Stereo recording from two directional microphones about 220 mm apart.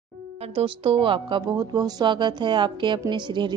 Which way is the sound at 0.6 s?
25° right (ahead or behind).